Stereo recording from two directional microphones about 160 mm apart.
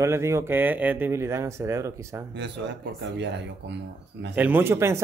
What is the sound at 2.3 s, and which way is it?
Speech, 90° right.